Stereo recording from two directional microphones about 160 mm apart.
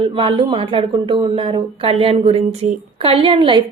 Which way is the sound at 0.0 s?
35° right (ahead or behind).